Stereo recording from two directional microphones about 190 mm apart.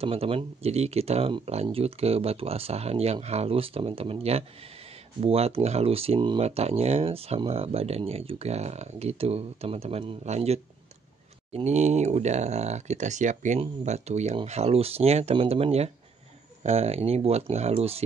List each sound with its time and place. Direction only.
0.0 s speech: 30° right (ahead or behind)